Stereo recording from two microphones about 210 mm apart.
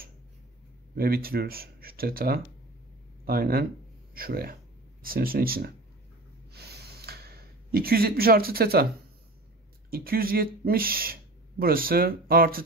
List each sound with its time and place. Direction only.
0.9 s speech: 45° right (ahead or behind)
6.5 s a sound: 50° right (ahead or behind)
9.8 s speech: 45° right (ahead or behind)